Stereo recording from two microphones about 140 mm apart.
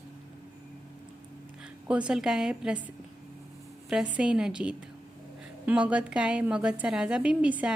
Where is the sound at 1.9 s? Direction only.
10° right (ahead or behind).